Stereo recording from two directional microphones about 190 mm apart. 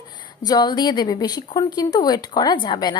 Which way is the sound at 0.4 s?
20° left (ahead or behind).